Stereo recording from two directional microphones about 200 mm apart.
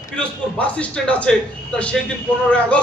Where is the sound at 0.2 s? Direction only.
5° left (ahead or behind).